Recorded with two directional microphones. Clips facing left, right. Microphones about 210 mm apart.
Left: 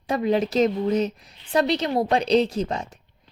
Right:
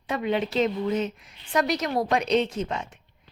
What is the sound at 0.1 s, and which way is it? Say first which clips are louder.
Speech: left 4 dB; 40° left (ahead or behind).